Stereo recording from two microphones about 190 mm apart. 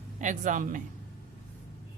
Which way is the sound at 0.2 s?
40° right (ahead or behind).